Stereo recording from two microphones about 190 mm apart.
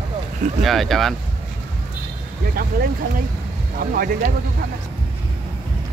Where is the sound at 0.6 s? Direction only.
Centre (ahead or behind).